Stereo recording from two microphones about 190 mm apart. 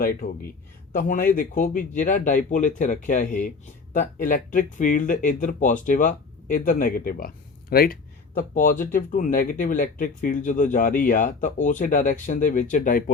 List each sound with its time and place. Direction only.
0.0 s speech: 50° left (ahead or behind)